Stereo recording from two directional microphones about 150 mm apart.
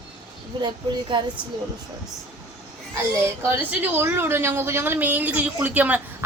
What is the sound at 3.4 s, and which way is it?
A woman's voice, 15° right (ahead or behind).